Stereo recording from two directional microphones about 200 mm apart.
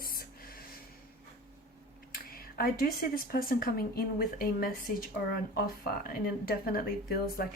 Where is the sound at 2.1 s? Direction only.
45° left (ahead or behind).